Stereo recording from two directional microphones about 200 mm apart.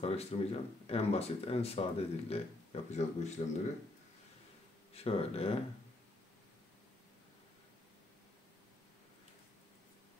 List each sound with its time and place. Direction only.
0.0 s speech: 30° left (ahead or behind)
4.9 s speech: 30° left (ahead or behind)